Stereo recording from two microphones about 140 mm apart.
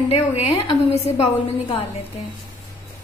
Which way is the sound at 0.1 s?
45° left (ahead or behind).